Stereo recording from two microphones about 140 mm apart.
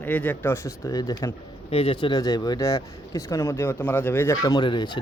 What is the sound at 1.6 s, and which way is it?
A man's voice, 40° left (ahead or behind).